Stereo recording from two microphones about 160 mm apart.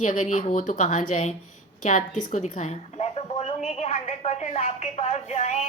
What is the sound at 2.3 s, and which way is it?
A woman's voice, 50° left (ahead or behind).